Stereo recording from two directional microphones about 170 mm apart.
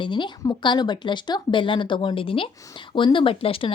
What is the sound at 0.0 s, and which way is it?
Speech, 30° left (ahead or behind).